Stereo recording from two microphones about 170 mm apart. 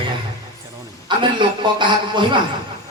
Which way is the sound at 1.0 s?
25° right (ahead or behind).